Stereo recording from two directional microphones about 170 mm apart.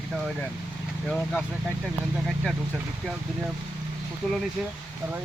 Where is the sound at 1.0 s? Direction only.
5° left (ahead or behind).